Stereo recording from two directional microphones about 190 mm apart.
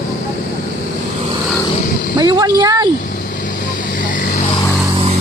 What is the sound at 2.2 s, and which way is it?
Speech, 20° right (ahead or behind).